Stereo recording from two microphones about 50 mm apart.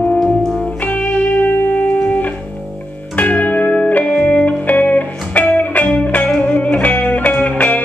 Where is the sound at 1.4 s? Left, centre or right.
Left.